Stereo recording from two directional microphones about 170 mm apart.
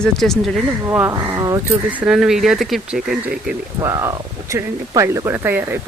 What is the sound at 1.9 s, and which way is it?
Speech, 5° right (ahead or behind).